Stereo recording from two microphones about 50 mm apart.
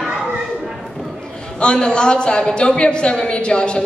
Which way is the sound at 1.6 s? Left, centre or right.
Centre.